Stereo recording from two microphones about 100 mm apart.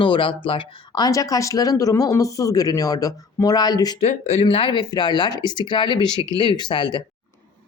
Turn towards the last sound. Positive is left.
turn(degrees=50)  # may be behind; listen again after turning